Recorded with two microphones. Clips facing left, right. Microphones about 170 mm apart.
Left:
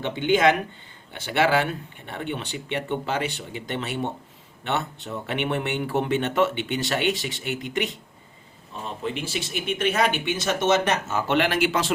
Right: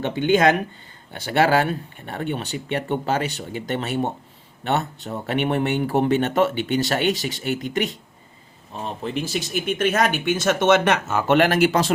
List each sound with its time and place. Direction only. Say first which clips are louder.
0.0 s speech: right 2 dB; 45° right (ahead or behind)
9.1 s speech: right 5 dB; 40° right (ahead or behind)